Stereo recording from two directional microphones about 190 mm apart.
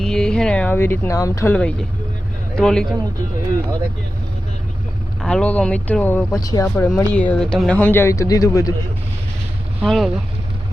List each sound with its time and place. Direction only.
0.0 s speech: centre (ahead or behind)
5.2 s speech: 5° left (ahead or behind)
6.4 s speech: 20° left (ahead or behind)
6.8 s speech: 5° left (ahead or behind)
9.8 s speech: centre (ahead or behind)